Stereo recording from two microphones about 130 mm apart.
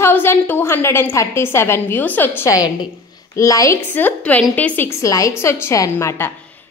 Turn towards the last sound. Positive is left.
turn(degrees=20)  # may be behind; listen again after turning